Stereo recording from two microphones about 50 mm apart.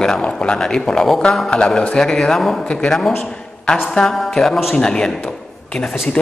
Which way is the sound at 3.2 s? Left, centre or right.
Centre.